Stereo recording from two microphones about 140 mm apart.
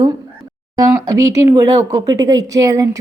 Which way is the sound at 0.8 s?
25° right (ahead or behind).